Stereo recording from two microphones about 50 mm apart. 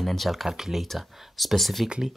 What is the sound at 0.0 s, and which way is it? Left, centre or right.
Speech, centre.